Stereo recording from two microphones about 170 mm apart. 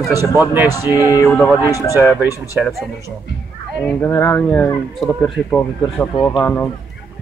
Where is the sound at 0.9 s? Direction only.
20° left (ahead or behind).